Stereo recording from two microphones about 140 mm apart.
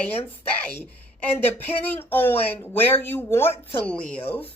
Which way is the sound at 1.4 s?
15° left (ahead or behind).